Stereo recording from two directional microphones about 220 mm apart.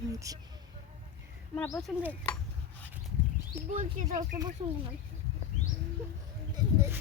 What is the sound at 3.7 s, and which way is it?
Speech, 35° right (ahead or behind).